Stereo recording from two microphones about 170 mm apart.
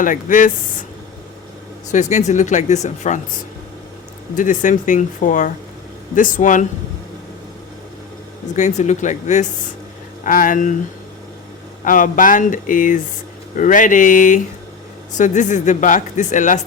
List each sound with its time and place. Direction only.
0.0 s speech: 50° left (ahead or behind)
1.9 s speech: 45° left (ahead or behind)
4.4 s speech: 50° left (ahead or behind)
8.5 s speech: 45° left (ahead or behind)
11.9 s speech: 50° left (ahead or behind)